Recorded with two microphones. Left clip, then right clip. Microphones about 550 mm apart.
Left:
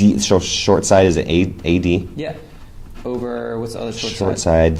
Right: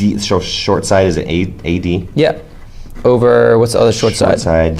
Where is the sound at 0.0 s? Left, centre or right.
Centre.